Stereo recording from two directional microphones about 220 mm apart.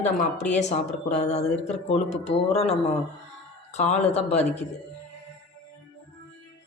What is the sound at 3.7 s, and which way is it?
Speech, 30° left (ahead or behind).